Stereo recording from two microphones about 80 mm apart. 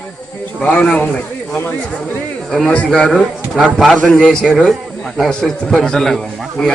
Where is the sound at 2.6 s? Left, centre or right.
Centre.